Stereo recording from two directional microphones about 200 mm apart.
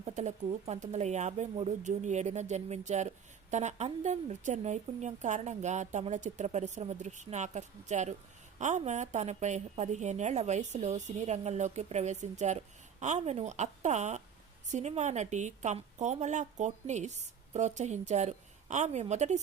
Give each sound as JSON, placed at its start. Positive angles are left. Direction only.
{"t": 0.0, "sound": "a woman's voice", "side_deg": -35}